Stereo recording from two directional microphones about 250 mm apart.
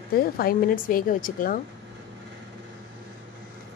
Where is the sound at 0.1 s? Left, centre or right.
Left.